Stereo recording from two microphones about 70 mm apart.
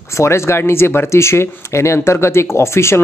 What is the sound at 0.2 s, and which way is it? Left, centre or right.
Speech, left.